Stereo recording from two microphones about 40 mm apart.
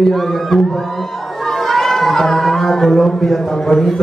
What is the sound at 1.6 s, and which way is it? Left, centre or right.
Speech, centre.